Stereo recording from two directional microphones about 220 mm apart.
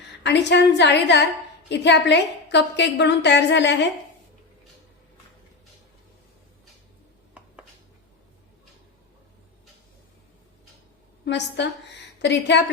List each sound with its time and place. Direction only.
0.2 s a woman's voice: 50° left (ahead or behind)
11.3 s a woman's voice: 50° left (ahead or behind)